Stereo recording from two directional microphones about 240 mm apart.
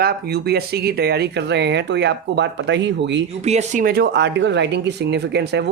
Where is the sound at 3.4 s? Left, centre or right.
Right.